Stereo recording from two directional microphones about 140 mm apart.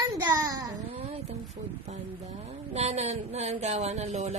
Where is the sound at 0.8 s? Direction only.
45° right (ahead or behind).